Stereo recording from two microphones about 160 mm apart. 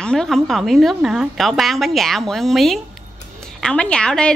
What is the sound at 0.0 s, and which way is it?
A woman's voice, 5° left (ahead or behind).